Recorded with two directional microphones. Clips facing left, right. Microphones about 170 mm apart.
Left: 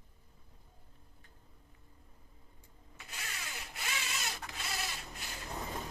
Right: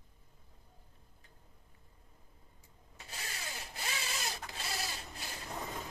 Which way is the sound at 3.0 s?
35° right (ahead or behind).